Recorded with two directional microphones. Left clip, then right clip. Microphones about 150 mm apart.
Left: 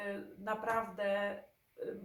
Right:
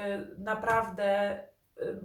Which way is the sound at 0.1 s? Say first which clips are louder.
Right 6 dB; 10° right (ahead or behind).